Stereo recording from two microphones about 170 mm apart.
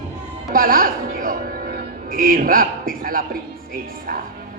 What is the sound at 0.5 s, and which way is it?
A woman's voice, 60° right (ahead or behind).